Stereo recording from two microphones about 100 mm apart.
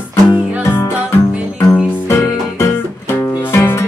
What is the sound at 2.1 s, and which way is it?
Music, 30° left (ahead or behind).